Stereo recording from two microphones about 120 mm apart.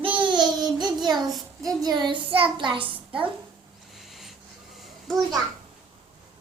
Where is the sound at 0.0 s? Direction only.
45° right (ahead or behind).